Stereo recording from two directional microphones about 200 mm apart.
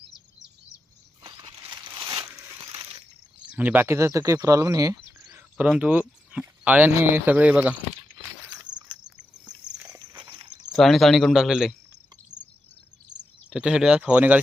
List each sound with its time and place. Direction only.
1.2 s a sound: 25° right (ahead or behind)
2.0 s crumpling: 25° right (ahead or behind)
3.5 s speech: 10° right (ahead or behind)
5.6 s speech: 5° right (ahead or behind)
10.0 s dog: 20° right (ahead or behind)
10.7 s speech: centre (ahead or behind)
13.5 s speech: 5° right (ahead or behind)